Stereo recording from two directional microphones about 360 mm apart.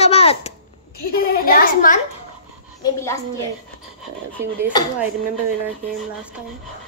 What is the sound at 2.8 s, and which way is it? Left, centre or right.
Speech, centre.